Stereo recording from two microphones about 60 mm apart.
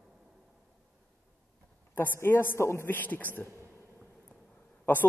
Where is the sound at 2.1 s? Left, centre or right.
Left.